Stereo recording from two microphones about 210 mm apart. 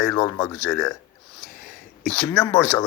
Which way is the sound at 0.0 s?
10° left (ahead or behind).